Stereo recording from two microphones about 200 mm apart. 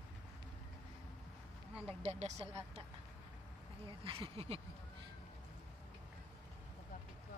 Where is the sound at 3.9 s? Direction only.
25° right (ahead or behind).